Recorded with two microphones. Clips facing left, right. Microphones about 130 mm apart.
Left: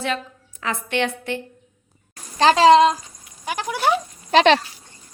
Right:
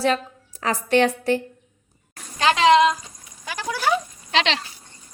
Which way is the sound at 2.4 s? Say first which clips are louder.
Left 3 dB; 35° left (ahead or behind).